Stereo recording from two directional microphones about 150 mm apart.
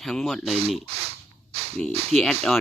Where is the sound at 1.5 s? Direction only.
40° right (ahead or behind).